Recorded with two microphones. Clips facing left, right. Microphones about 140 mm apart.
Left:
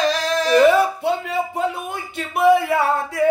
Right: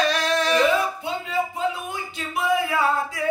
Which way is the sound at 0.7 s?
65° left (ahead or behind).